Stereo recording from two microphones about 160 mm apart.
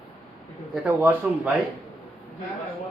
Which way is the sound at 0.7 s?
10° right (ahead or behind).